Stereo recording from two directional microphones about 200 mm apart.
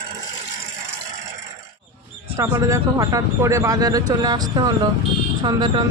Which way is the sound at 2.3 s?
15° right (ahead or behind).